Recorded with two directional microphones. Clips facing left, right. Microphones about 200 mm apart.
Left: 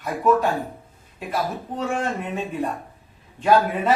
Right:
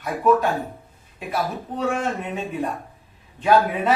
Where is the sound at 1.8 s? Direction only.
Centre (ahead or behind).